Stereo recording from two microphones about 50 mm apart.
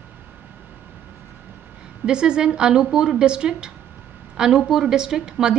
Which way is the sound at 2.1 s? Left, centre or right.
Centre.